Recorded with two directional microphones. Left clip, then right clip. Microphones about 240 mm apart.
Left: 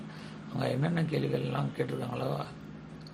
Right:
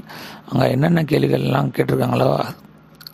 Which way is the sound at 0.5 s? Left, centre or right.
Right.